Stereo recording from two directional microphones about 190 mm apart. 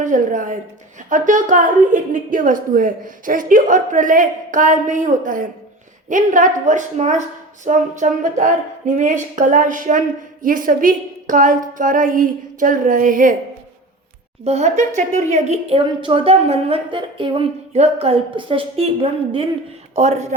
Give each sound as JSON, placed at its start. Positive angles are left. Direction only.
{"t": 0.0, "sound": "a woman's voice", "side_deg": -45}
{"t": 14.4, "sound": "speech", "side_deg": -35}